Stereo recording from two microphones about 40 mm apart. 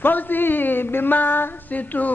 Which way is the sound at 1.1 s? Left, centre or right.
Left.